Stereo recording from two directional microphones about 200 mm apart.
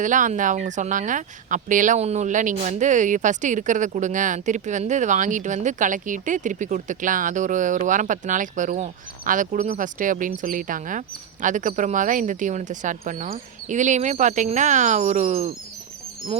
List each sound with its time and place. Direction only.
0.0 s speech: 40° right (ahead or behind)